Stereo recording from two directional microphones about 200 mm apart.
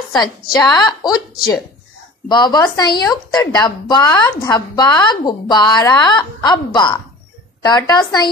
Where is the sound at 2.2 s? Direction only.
20° left (ahead or behind).